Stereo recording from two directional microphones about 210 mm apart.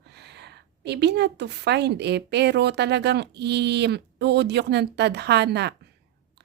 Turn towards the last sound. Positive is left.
turn(degrees=-55)  # may be behind; listen again after turning